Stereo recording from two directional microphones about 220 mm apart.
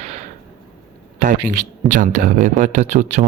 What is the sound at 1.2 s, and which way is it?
Speech, 40° right (ahead or behind).